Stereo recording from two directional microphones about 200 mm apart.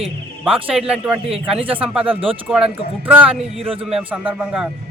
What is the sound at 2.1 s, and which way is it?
Speech, 25° right (ahead or behind).